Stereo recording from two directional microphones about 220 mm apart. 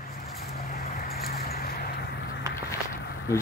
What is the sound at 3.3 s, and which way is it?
Speech, 15° left (ahead or behind).